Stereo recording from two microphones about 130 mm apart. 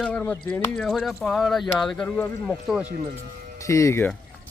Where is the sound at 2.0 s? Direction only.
15° left (ahead or behind).